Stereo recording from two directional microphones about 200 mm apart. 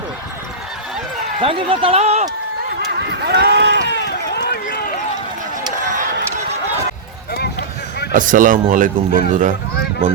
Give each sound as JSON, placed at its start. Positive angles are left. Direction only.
{"t": 1.4, "sound": "speech", "side_deg": -25}
{"t": 3.2, "sound": "a sound", "side_deg": -55}
{"t": 3.8, "sound": "run", "side_deg": 60}
{"t": 8.1, "sound": "speech", "side_deg": -40}